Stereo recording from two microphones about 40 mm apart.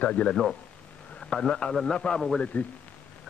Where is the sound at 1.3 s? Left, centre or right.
Left.